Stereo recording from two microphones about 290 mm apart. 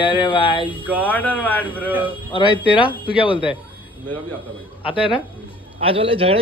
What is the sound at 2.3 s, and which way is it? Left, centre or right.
Speech, centre.